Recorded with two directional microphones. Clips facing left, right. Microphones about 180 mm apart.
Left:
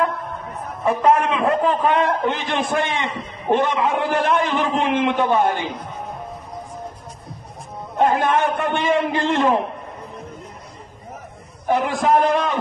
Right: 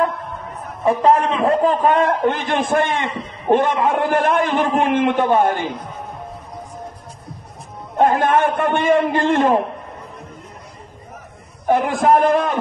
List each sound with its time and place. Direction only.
0.8 s a man's voice: 35° right (ahead or behind); by 5.7 s 50° right (ahead or behind)
8.0 s a man's voice: 50° right (ahead or behind)
11.6 s a man's voice: 50° right (ahead or behind)